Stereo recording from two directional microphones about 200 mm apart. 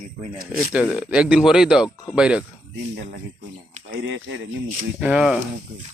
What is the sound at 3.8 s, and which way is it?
Speech, 60° right (ahead or behind).